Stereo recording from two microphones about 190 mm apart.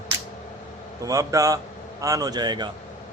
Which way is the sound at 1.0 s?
15° right (ahead or behind).